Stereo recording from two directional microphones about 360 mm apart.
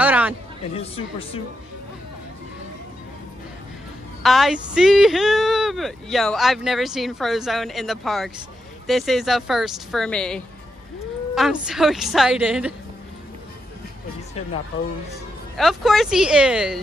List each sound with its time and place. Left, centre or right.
0.0 s a sound: centre
0.7 s speech: centre
4.2 s speech: centre
15.5 s speech: centre